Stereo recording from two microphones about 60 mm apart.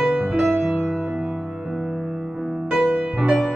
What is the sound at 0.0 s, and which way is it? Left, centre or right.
Music, centre.